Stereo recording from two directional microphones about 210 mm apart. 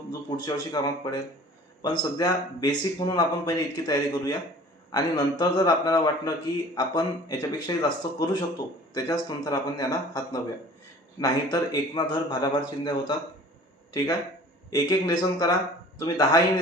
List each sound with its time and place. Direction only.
0.1 s a man's voice: 20° left (ahead or behind)
14.7 s a man's voice: 20° left (ahead or behind)